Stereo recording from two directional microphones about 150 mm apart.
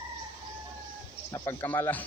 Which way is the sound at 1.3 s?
20° left (ahead or behind).